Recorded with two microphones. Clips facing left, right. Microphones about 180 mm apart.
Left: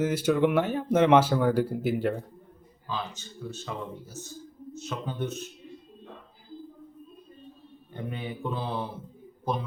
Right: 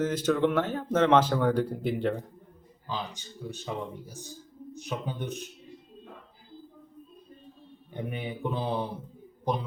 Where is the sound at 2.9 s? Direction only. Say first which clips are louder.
Left 1 dB; 15° right (ahead or behind).